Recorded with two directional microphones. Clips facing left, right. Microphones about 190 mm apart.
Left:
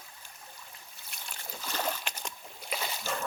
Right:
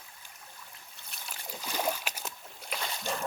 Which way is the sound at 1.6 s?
10° right (ahead or behind).